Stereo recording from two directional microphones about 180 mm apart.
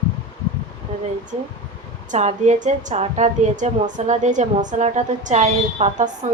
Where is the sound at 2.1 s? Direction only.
40° right (ahead or behind).